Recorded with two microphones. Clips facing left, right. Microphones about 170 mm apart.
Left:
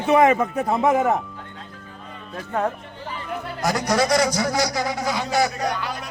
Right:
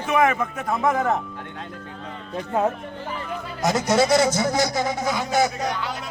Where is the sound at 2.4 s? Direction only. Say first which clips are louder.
Right 2 dB; 15° right (ahead or behind).